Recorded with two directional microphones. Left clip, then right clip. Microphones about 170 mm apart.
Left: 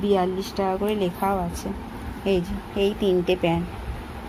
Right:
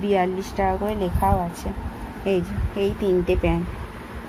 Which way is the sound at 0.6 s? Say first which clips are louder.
Right 1 dB; 25° left (ahead or behind).